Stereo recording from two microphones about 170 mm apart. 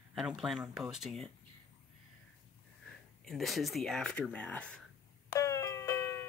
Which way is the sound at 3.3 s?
Centre (ahead or behind).